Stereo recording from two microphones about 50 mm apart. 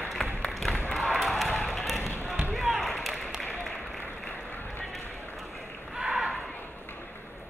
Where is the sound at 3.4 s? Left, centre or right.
Centre.